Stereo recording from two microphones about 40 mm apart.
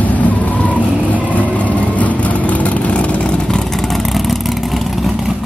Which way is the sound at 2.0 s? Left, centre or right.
Left.